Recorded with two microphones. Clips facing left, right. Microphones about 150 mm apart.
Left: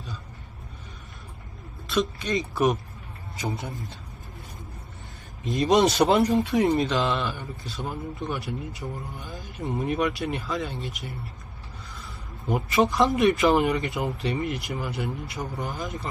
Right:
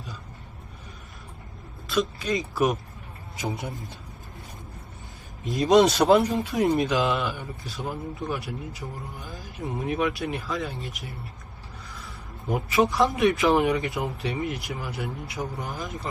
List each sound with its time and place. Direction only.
1.9 s a man's voice: 5° right (ahead or behind)
5.5 s a man's voice: centre (ahead or behind)